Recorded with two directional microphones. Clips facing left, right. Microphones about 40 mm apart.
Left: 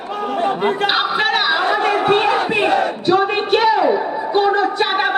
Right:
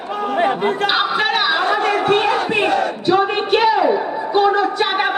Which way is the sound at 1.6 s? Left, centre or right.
Left.